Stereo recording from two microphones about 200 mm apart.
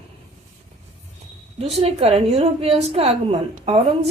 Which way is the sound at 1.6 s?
30° right (ahead or behind).